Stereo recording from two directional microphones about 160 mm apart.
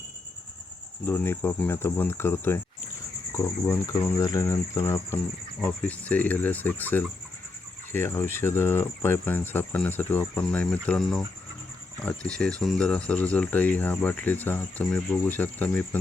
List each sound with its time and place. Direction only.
1.0 s speech: 15° left (ahead or behind)
5.6 s speech: 10° left (ahead or behind)